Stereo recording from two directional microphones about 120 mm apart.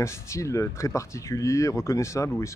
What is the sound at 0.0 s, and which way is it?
Speech, 25° left (ahead or behind).